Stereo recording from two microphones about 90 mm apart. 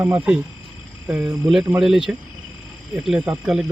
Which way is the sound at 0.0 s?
15° right (ahead or behind).